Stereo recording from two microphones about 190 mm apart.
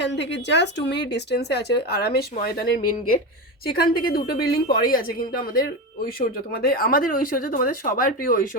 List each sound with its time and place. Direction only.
0.0 s speech: 65° left (ahead or behind); by 8.4 s 50° left (ahead or behind)